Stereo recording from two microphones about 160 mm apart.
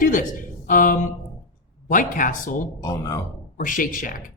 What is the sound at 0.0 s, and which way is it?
Speech, 60° left (ahead or behind).